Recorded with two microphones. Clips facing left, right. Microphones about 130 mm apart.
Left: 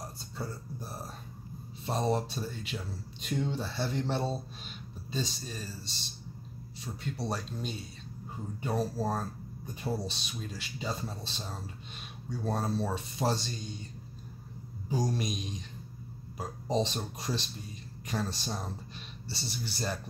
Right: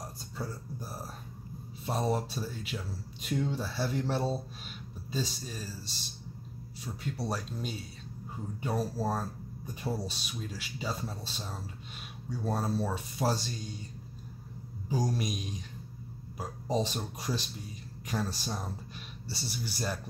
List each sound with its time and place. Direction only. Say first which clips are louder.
0.0 s a sound: even; 10° right (ahead or behind)
1.9 s a man's voice: left 1 dB; 5° right (ahead or behind)
15.0 s a man's voice: even; 5° right (ahead or behind)